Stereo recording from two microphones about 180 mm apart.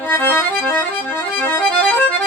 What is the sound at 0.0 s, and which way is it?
Music, 10° left (ahead or behind).